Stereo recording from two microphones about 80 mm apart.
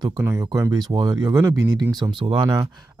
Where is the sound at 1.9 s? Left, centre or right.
Right.